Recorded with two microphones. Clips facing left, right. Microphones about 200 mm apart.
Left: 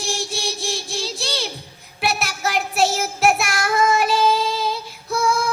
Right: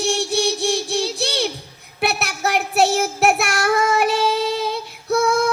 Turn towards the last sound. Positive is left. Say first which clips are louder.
# right 4 dB
turn(degrees=-65)  # may be behind; listen again after turning